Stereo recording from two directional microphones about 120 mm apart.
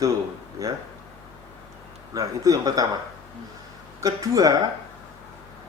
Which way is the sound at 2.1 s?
30° right (ahead or behind).